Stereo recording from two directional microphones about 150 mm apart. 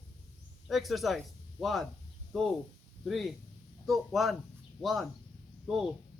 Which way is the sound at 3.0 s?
Centre (ahead or behind).